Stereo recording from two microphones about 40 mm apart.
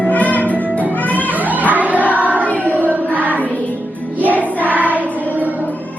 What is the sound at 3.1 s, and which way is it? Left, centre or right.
Music, right.